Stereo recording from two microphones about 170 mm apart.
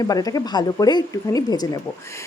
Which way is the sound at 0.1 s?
20° left (ahead or behind).